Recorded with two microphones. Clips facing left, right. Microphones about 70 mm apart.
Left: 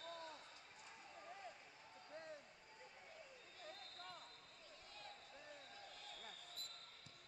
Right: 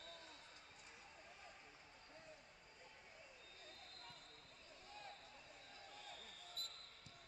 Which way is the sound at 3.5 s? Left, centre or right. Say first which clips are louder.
Left 8 dB; left.